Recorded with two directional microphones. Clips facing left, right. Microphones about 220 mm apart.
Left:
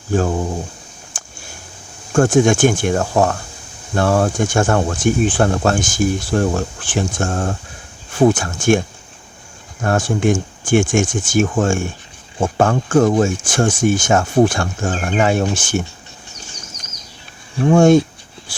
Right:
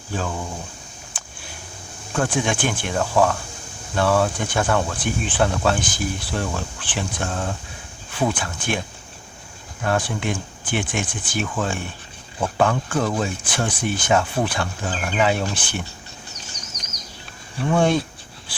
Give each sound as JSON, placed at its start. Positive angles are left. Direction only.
{"t": 0.1, "sound": "speech", "side_deg": 45}
{"t": 2.1, "sound": "speech", "side_deg": 45}
{"t": 9.8, "sound": "speech", "side_deg": 45}
{"t": 17.6, "sound": "speech", "side_deg": 45}